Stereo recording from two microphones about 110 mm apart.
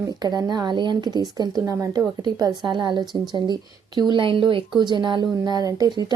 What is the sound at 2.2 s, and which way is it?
Speech, 40° right (ahead or behind).